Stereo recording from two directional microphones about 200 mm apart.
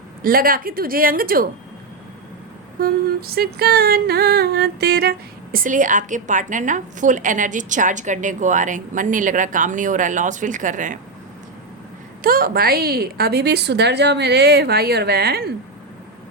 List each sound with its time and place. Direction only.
0.2 s a woman's voice: 45° right (ahead or behind)
2.8 s a sound: 50° right (ahead or behind)
12.2 s a woman's voice: 45° right (ahead or behind)